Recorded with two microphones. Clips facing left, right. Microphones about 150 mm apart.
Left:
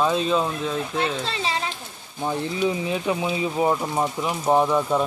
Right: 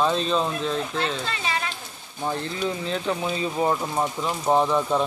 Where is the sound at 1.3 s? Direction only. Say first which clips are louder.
Left 2 dB; 25° left (ahead or behind).